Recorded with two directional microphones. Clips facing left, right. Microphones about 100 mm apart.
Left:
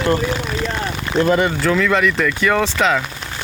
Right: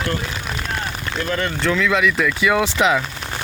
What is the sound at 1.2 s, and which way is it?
Speech, 25° left (ahead or behind).